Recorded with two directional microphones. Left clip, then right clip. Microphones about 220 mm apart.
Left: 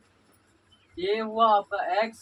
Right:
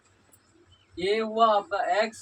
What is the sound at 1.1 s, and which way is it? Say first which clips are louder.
Speech: even; centre (ahead or behind).